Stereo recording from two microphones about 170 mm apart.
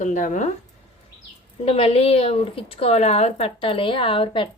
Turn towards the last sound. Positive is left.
turn(degrees=30)  # may be behind; listen again after turning